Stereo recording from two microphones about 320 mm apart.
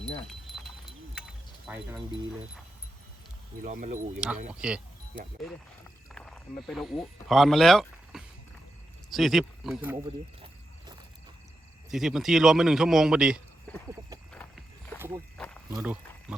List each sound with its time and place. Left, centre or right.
1.6 s speech: centre
3.6 s speech: right
4.5 s speech: centre
6.1 s speech: centre
11.9 s a man's voice: centre
14.9 s wild animals: centre
15.7 s speech: centre